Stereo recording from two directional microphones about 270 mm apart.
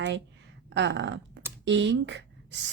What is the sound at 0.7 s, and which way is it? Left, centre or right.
A woman's voice, right.